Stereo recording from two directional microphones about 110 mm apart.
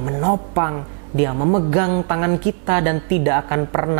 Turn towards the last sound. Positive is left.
turn(degrees=-15)  # may be behind; listen again after turning